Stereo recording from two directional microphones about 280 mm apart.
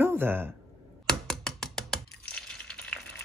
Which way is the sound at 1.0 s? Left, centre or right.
Centre.